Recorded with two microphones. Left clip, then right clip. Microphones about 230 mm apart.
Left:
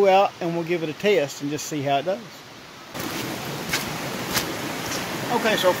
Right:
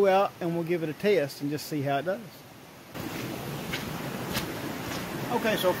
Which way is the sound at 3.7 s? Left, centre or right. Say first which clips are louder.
Left 8 dB; left.